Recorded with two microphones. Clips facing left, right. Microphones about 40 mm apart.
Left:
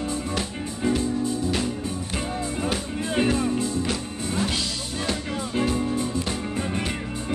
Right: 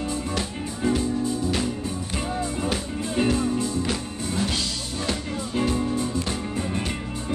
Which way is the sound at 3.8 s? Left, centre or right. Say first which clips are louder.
Even; centre.